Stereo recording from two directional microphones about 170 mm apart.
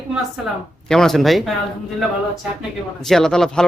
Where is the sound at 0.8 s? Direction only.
5° left (ahead or behind).